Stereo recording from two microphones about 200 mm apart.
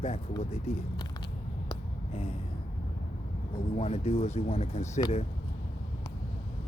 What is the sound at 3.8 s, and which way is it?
Speech, 35° left (ahead or behind).